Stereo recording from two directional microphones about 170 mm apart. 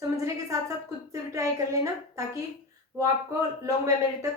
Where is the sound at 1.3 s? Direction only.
20° right (ahead or behind).